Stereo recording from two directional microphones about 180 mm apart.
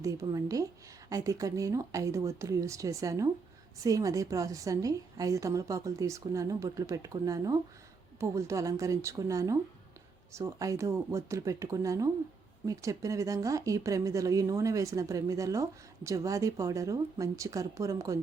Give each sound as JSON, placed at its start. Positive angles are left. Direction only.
{"t": 0.0, "sound": "speech", "side_deg": -20}